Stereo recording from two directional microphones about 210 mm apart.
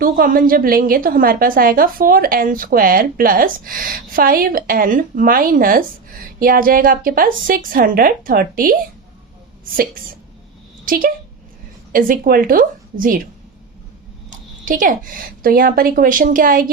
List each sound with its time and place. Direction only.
0.0 s a woman's voice: 40° right (ahead or behind)
9.7 s a woman's voice: 40° right (ahead or behind)
14.3 s a woman's voice: 40° right (ahead or behind)